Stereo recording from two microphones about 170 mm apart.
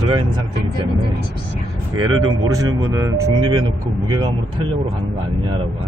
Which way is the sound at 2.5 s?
20° right (ahead or behind).